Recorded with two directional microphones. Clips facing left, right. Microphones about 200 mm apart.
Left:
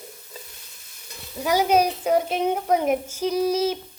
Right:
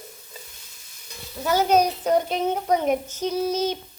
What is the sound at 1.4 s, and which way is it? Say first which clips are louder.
A woman's voice: even; 10° left (ahead or behind).